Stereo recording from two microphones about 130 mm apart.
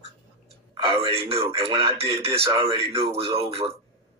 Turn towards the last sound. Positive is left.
turn(degrees=-50)  # may be behind; listen again after turning